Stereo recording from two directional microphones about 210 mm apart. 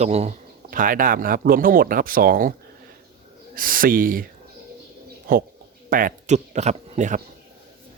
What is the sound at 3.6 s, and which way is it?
Speech, 40° right (ahead or behind).